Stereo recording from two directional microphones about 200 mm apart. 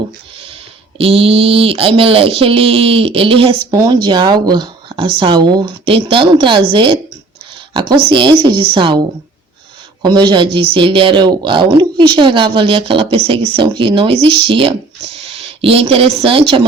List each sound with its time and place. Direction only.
0.9 s speech: 30° right (ahead or behind)
10.0 s a woman's voice: 20° right (ahead or behind)